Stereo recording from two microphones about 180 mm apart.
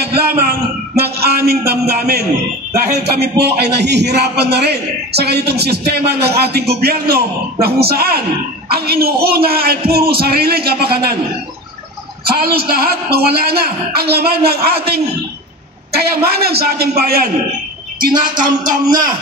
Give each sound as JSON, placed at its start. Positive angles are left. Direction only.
{"t": 0.2, "sound": "a man's voice", "side_deg": -60}
{"t": 12.3, "sound": "a man's voice", "side_deg": -60}
{"t": 18.7, "sound": "a man's voice", "side_deg": -50}